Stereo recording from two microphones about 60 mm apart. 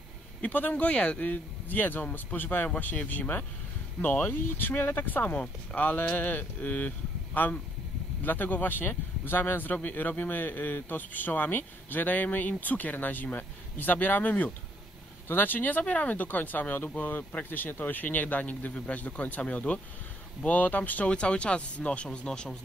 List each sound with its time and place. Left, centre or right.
0.4 s speech: left
21.1 s speech: centre